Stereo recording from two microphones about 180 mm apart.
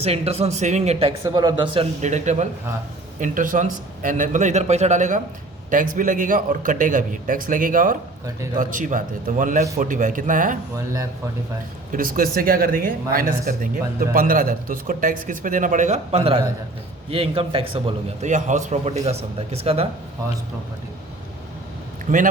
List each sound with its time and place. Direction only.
0.0 s a man's voice: 35° right (ahead or behind)
1.2 s a man's voice: 25° right (ahead or behind); by 10.6 s 50° right (ahead or behind)
11.9 s a man's voice: 50° right (ahead or behind); by 19.9 s 35° right (ahead or behind)
22.1 s speech: 45° right (ahead or behind)